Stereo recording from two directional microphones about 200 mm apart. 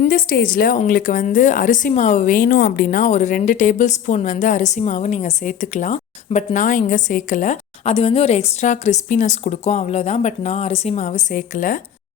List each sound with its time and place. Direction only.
0.0 s a woman's voice: 45° left (ahead or behind)